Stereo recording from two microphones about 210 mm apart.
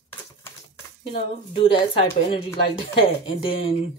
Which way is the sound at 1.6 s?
25° left (ahead or behind).